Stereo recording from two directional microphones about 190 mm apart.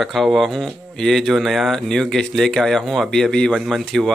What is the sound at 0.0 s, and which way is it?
Speech, centre (ahead or behind).